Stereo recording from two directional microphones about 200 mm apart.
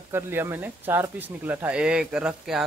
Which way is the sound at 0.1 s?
10° right (ahead or behind).